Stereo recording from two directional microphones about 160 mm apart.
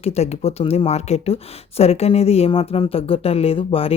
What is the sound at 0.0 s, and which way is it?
Speech, 40° left (ahead or behind).